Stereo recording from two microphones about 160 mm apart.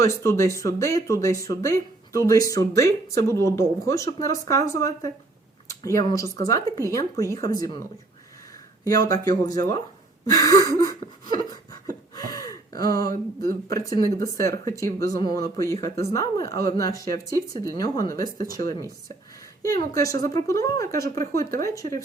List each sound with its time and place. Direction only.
0.0 s speech: 15° left (ahead or behind)
8.8 s speech: 25° left (ahead or behind)
11.3 s a sound: 25° left (ahead or behind)
12.3 s gasp: 20° left (ahead or behind)
13.1 s a sound: 65° right (ahead or behind)
13.7 s speech: 20° left (ahead or behind)